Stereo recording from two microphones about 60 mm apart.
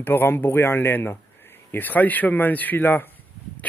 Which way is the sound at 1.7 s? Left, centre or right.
Left.